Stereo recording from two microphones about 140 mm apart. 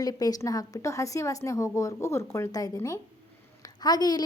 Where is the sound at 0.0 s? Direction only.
25° left (ahead or behind).